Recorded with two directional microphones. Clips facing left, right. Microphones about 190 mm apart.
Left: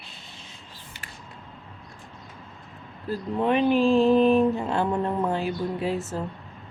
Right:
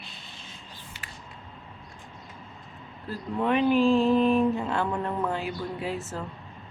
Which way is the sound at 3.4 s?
25° left (ahead or behind).